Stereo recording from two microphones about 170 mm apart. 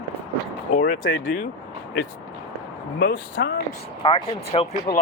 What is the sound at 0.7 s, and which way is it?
Speech, 55° left (ahead or behind).